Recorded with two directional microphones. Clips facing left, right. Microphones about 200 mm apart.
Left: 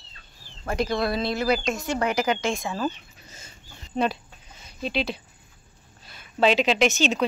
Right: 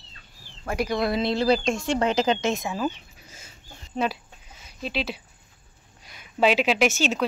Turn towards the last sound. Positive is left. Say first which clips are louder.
# left 1 dB
turn(degrees=-5)  # may be behind; listen again after turning